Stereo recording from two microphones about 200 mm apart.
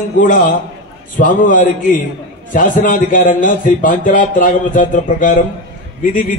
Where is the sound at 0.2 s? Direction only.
40° left (ahead or behind).